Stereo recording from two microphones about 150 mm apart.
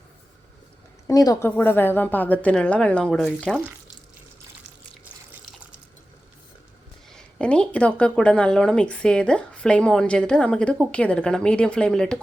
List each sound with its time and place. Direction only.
1.0 s a woman's voice: 25° left (ahead or behind)
1.5 s speech: 15° left (ahead or behind)
7.1 s speech: 5° left (ahead or behind)